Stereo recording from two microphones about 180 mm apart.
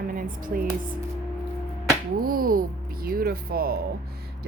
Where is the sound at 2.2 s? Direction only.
55° right (ahead or behind).